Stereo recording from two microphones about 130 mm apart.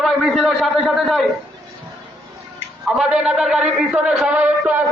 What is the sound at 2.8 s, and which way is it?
A man's voice, 5° right (ahead or behind).